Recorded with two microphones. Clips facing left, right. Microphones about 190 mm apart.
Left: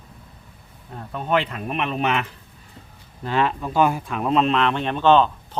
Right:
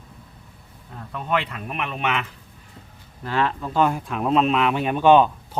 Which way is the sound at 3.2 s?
15° left (ahead or behind).